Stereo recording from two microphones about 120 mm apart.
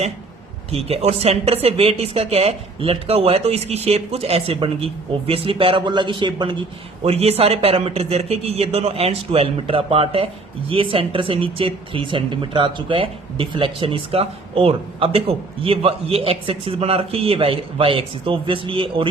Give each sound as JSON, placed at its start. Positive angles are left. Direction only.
{"t": 0.7, "sound": "speech", "side_deg": -55}
{"t": 7.0, "sound": "speech", "side_deg": -60}